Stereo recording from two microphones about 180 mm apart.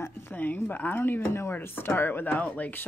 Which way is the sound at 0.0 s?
10° left (ahead or behind).